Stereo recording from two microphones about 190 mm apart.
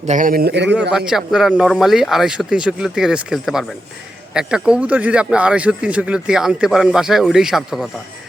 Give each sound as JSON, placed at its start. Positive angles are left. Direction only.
{"t": 0.0, "sound": "a man's voice", "side_deg": -40}
{"t": 0.9, "sound": "speech", "side_deg": -5}